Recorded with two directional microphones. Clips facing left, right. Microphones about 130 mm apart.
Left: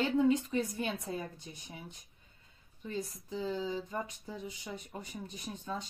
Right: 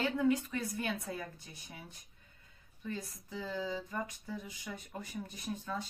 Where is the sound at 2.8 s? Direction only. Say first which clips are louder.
Left 3 dB; 20° left (ahead or behind).